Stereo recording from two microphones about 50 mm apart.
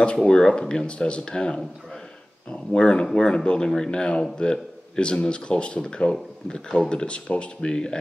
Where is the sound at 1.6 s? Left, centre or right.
Centre.